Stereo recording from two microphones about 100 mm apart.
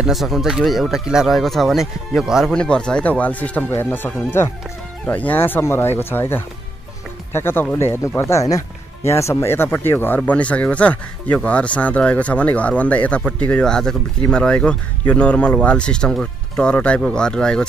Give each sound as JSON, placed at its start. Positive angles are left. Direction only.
{"t": 0.0, "sound": "speech", "side_deg": 0}
{"t": 2.5, "sound": "speech", "side_deg": 10}